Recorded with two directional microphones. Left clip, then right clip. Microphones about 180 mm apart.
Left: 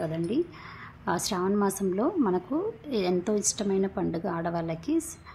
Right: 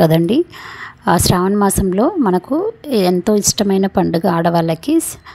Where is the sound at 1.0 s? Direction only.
45° right (ahead or behind).